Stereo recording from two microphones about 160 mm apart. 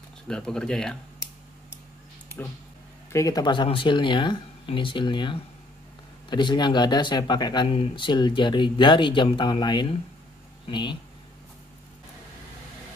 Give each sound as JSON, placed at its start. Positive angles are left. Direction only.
{"t": 0.3, "sound": "speech", "side_deg": 5}
{"t": 3.1, "sound": "speech", "side_deg": 20}